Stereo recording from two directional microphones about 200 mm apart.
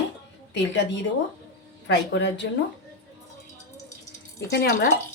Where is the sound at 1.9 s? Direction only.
60° left (ahead or behind).